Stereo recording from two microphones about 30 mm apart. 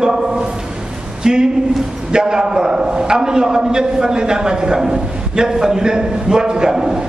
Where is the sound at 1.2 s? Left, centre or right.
Right.